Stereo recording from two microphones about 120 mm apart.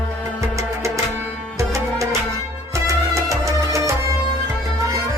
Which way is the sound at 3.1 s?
25° right (ahead or behind).